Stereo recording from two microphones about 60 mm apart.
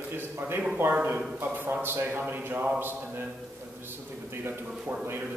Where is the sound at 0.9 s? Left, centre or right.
Right.